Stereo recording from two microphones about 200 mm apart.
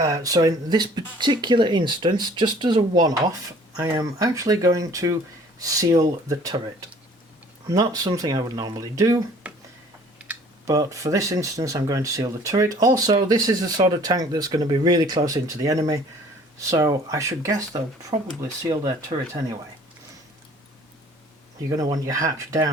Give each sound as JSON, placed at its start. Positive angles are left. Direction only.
{"t": 0.0, "sound": "speech", "side_deg": -15}
{"t": 18.1, "sound": "speech", "side_deg": -30}
{"t": 18.6, "sound": "speech", "side_deg": -20}
{"t": 21.7, "sound": "speech", "side_deg": -20}